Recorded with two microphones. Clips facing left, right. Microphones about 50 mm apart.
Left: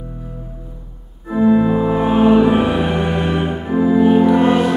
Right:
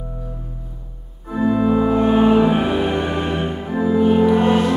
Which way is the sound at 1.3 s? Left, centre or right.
Centre.